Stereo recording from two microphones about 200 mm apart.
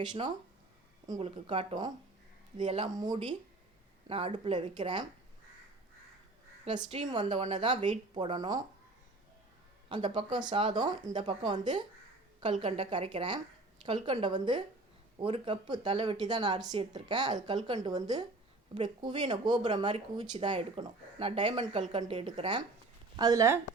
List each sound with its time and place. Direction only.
0.0 s a woman's voice: 20° right (ahead or behind)
6.7 s a woman's voice: 25° right (ahead or behind)
9.9 s a woman's voice: 25° right (ahead or behind)